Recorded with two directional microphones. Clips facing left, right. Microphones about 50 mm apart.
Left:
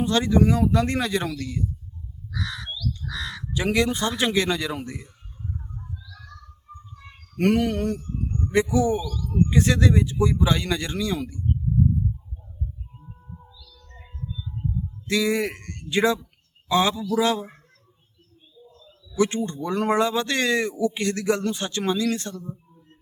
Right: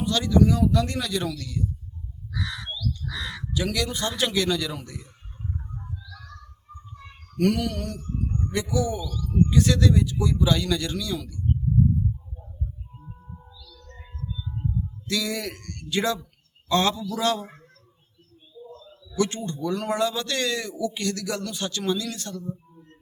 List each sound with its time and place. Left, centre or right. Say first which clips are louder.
0.0 s speech: left 1 dB; left
2.3 s crow: even; centre
3.5 s speech: left 5 dB; left
7.3 s speech: left 3 dB; left
8.3 s a sound: even; centre
8.7 s speech: left 4 dB; left
13.0 s music: even; centre
15.0 s speech: left 6 dB; left
16.6 s a man's voice: left 2 dB; centre
19.1 s speech: left 3 dB; centre